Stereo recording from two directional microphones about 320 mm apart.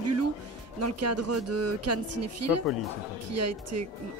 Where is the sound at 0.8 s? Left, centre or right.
Right.